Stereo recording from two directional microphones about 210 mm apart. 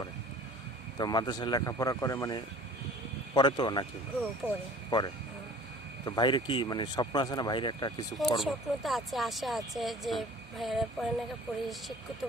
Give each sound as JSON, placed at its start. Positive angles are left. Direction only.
{"t": 0.9, "sound": "speech", "side_deg": 20}
{"t": 4.4, "sound": "speech", "side_deg": -10}
{"t": 4.9, "sound": "speech", "side_deg": 20}
{"t": 8.4, "sound": "speech", "side_deg": 0}